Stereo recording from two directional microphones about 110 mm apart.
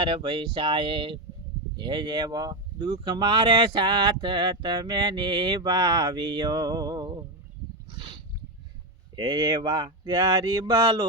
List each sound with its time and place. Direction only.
0.0 s speech: 50° right (ahead or behind)
7.9 s a sound: 45° right (ahead or behind)
9.1 s speech: 40° right (ahead or behind)